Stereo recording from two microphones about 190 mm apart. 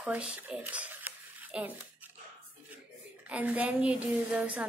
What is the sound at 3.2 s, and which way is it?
A woman's voice, 10° right (ahead or behind).